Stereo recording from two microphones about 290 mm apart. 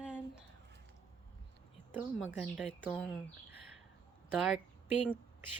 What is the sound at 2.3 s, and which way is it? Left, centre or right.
Speech, centre.